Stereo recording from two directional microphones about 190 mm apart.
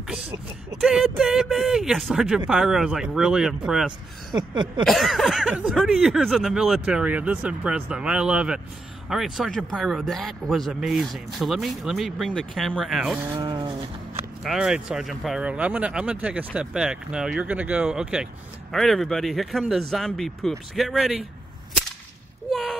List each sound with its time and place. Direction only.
0.7 s a man's voice: centre (ahead or behind)
13.4 s a sound: 25° right (ahead or behind)
14.4 s a man's voice: centre (ahead or behind)
22.5 s a man's voice: centre (ahead or behind)